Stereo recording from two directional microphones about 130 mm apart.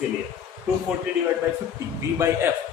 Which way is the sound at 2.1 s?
20° right (ahead or behind).